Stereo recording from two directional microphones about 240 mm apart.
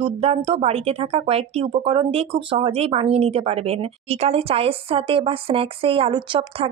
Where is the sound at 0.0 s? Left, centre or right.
Right.